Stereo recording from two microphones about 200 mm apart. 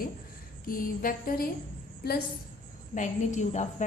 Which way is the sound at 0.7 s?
45° left (ahead or behind).